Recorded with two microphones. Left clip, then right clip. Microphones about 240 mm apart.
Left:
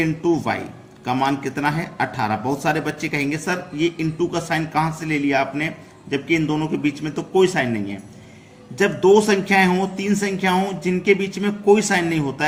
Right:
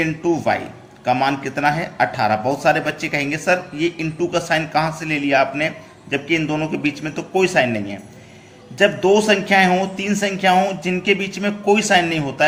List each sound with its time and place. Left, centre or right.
0.0 s a man's voice: centre